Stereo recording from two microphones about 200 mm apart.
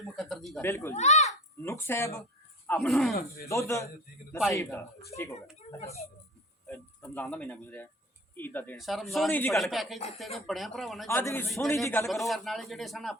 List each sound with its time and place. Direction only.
0.0 s speech: centre (ahead or behind)
0.6 s a man's voice: 15° left (ahead or behind)
0.9 s speech: 35° left (ahead or behind)
1.6 s a man's voice: 10° left (ahead or behind)
3.5 s a man's voice: 15° left (ahead or behind)
5.1 s speech: 30° left (ahead or behind)
6.7 s a man's voice: 10° left (ahead or behind)
11.1 s a man's voice: 10° left (ahead or behind)